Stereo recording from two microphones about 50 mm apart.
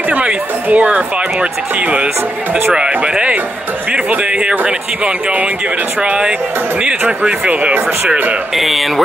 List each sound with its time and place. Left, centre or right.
0.1 s speech: right
8.5 s music: centre